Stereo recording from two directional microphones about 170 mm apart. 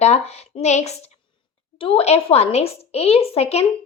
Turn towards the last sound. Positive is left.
turn(degrees=35)  # may be behind; listen again after turning